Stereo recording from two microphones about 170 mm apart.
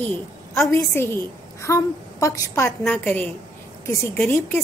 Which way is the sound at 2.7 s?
10° left (ahead or behind).